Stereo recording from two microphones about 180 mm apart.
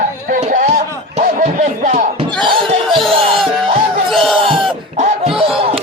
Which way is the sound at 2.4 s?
30° right (ahead or behind).